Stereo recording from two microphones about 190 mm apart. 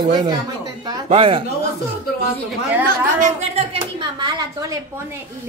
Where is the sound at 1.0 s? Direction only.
30° right (ahead or behind).